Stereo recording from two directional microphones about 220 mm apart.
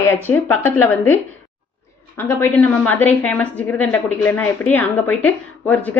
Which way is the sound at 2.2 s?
10° left (ahead or behind).